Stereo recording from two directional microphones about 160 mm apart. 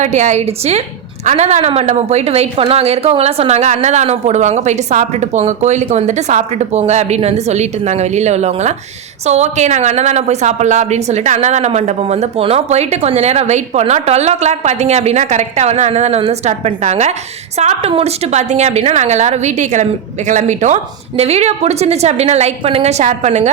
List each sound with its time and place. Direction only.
0.0 s a woman's voice: 45° right (ahead or behind)